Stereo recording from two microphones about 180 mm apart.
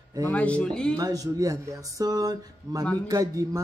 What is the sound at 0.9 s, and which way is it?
Speech, 20° right (ahead or behind).